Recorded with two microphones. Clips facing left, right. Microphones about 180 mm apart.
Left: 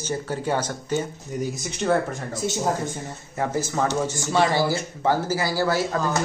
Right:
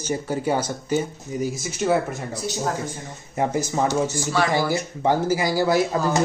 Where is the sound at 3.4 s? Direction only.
15° right (ahead or behind).